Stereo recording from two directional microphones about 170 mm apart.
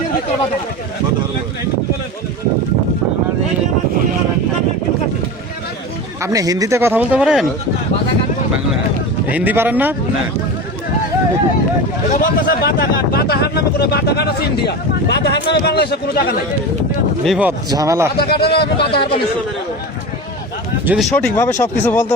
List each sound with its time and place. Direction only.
6.2 s speech: 20° right (ahead or behind)
9.3 s speech: 10° right (ahead or behind)
12.1 s speech: 50° left (ahead or behind); by 16.3 s 70° left (ahead or behind)
17.2 s speech: centre (ahead or behind)
17.7 s speech: 20° right (ahead or behind)
18.2 s speech: 70° left (ahead or behind)
20.8 s speech: 5° right (ahead or behind)
21.2 s speech: 15° left (ahead or behind)